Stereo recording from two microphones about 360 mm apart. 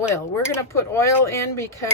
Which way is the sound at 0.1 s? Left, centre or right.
Centre.